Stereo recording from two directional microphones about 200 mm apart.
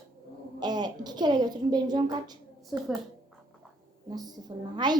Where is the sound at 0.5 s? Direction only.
20° right (ahead or behind).